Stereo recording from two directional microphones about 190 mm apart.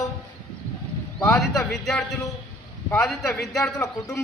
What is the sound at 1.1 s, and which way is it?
A man's voice, 5° left (ahead or behind).